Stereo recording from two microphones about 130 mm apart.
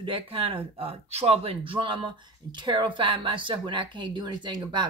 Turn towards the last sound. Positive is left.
turn(degrees=-35)  # may be behind; listen again after turning